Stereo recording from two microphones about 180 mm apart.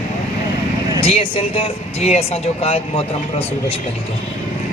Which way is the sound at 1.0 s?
30° left (ahead or behind).